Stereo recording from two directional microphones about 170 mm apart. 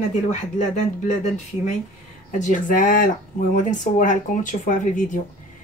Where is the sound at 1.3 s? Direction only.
45° left (ahead or behind).